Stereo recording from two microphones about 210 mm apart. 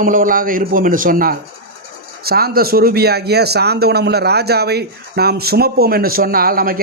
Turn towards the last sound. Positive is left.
turn(degrees=-45)  # may be behind; listen again after turning